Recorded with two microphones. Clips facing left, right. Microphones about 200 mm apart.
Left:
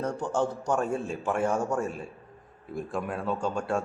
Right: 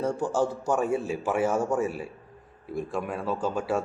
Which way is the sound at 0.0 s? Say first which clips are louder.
Right 2 dB; 10° right (ahead or behind).